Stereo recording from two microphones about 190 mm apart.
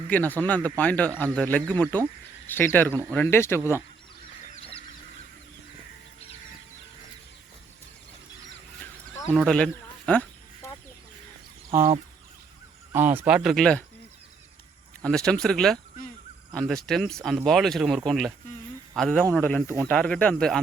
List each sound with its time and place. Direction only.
0.1 s speech: 10° left (ahead or behind)
3.6 s speech: 10° right (ahead or behind)
4.5 s fowl: 30° left (ahead or behind)
9.3 s speech: centre (ahead or behind)
10.1 s livestock: 5° left (ahead or behind)
12.9 s speech: 10° right (ahead or behind)
15.0 s speech: 5° left (ahead or behind)